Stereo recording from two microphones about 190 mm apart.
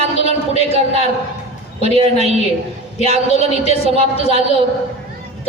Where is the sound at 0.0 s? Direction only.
35° right (ahead or behind).